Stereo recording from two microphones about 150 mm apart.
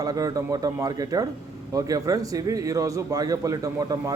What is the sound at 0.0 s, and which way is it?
A man's voice, 25° right (ahead or behind).